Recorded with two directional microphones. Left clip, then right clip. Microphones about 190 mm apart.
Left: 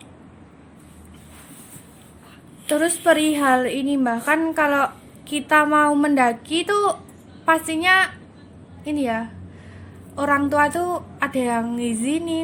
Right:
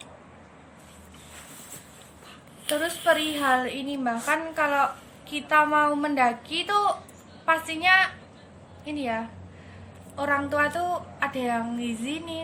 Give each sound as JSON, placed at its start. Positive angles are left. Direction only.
{"t": 2.6, "sound": "a woman's voice", "side_deg": 45}